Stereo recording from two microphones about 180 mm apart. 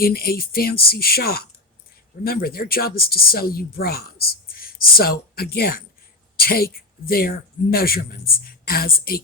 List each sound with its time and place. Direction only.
0.0 s speech: 55° left (ahead or behind)